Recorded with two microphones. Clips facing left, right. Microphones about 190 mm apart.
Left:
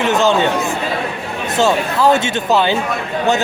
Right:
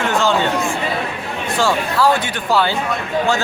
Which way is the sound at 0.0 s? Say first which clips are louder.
Left 3 dB; 20° left (ahead or behind).